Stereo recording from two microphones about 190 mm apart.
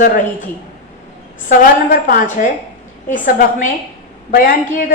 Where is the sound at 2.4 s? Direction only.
45° left (ahead or behind).